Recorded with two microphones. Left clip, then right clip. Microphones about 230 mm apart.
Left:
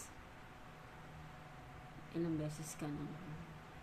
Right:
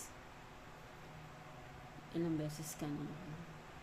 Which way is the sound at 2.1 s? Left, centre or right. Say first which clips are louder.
Right 1 dB; right.